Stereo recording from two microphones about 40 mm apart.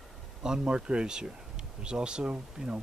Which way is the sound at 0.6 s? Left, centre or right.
Right.